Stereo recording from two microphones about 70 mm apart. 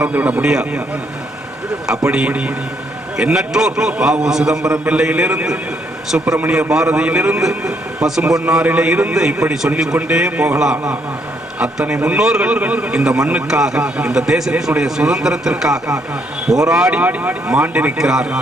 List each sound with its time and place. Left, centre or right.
0.0 s a man's voice: right
2.0 s a man's voice: centre
17.0 s a man's voice: right
17.9 s a man's voice: centre